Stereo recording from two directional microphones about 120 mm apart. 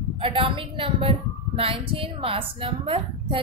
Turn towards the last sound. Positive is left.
turn(degrees=-50)  # may be behind; listen again after turning